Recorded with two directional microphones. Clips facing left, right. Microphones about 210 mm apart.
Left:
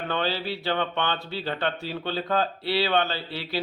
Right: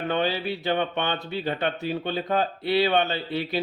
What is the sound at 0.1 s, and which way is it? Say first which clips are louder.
A man's voice: right 2 dB; 15° right (ahead or behind).